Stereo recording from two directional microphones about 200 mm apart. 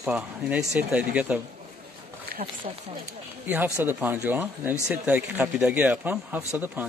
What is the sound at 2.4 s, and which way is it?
Speech, 35° right (ahead or behind).